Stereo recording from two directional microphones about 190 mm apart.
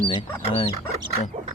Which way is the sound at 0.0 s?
25° left (ahead or behind).